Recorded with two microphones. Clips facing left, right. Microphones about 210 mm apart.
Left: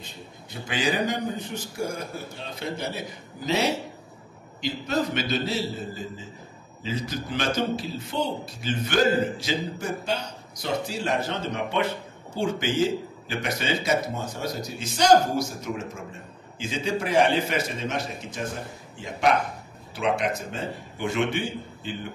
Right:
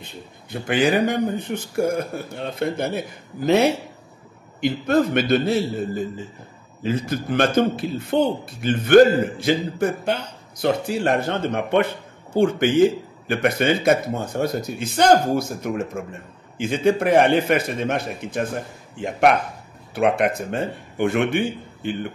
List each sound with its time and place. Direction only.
0.0 s speech: 60° right (ahead or behind)